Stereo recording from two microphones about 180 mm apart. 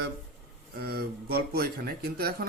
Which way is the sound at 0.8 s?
55° right (ahead or behind).